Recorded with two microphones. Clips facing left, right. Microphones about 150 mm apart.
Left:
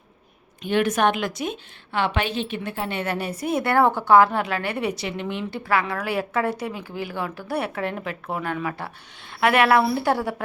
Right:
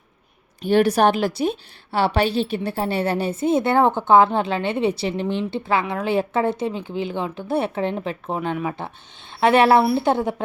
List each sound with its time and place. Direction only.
0.6 s a woman's voice: 35° right (ahead or behind)